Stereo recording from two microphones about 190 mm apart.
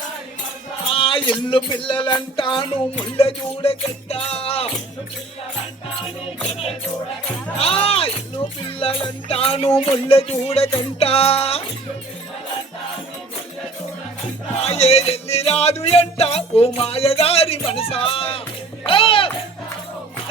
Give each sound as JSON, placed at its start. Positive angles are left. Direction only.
{"t": 0.9, "sound": "music", "side_deg": 30}
{"t": 7.6, "sound": "music", "side_deg": 30}
{"t": 14.7, "sound": "music", "side_deg": 35}